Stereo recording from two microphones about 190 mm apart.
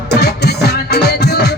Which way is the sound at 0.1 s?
60° left (ahead or behind).